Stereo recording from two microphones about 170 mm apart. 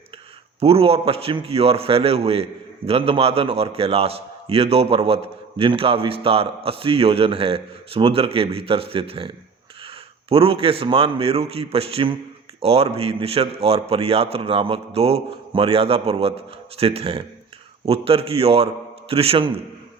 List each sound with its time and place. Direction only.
0.6 s a man's voice: 35° right (ahead or behind)